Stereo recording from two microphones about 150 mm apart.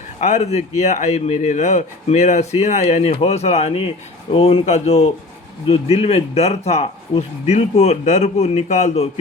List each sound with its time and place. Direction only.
0.2 s a man's voice: 50° left (ahead or behind)